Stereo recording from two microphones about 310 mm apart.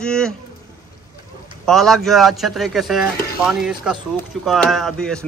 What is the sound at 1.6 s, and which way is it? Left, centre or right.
Speech, centre.